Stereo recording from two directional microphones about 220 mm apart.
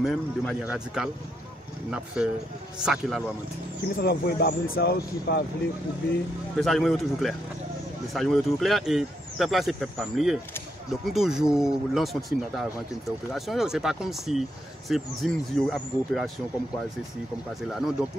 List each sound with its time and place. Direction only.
0.0 s speech: centre (ahead or behind)
2.2 s speech: 5° right (ahead or behind)
4.0 s speech: 45° left (ahead or behind)
6.6 s speech: centre (ahead or behind)
17.6 s speech: centre (ahead or behind)